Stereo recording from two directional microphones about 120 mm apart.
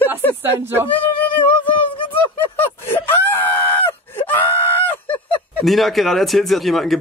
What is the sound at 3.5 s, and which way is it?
Screaming, 20° left (ahead or behind).